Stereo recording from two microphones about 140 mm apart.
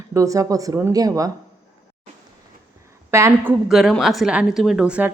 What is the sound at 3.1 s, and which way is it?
Speech, 20° right (ahead or behind).